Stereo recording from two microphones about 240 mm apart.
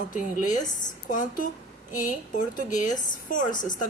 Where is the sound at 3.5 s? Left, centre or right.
Centre.